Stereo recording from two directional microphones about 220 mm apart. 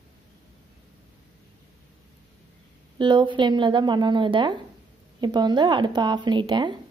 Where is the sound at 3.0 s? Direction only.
20° right (ahead or behind).